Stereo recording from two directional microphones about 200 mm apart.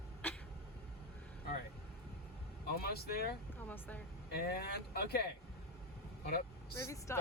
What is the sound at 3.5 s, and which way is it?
Speech, 10° left (ahead or behind).